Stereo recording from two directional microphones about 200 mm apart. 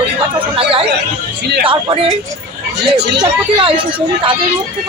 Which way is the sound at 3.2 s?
25° right (ahead or behind).